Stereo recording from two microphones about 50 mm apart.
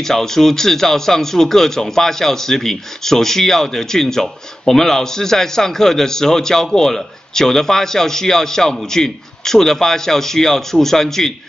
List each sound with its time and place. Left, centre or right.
0.0 s speech: centre